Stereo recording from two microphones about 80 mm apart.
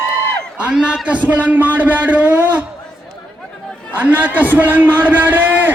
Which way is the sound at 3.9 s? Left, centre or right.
Right.